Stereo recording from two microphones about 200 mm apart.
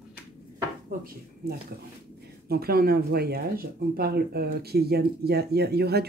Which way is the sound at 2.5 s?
50° right (ahead or behind).